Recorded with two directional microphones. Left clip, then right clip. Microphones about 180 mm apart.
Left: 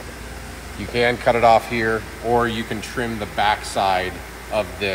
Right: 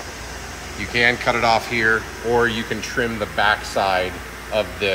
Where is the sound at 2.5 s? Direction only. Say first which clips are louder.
Right 3 dB; 65° left (ahead or behind).